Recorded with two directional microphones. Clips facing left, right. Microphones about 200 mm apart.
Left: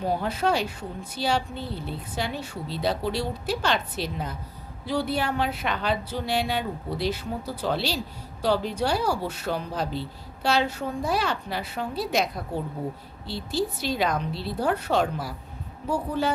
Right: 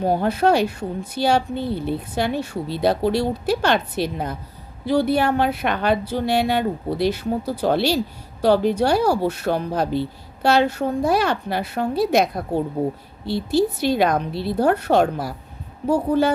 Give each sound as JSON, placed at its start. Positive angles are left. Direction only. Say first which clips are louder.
{"t": 0.0, "sound": "a woman's voice", "louder": "right 7 dB", "side_deg": -60}
{"t": 13.7, "sound": "a woman's voice", "louder": "right 7 dB", "side_deg": -65}